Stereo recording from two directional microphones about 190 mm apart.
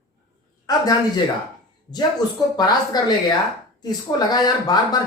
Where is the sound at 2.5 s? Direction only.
20° left (ahead or behind).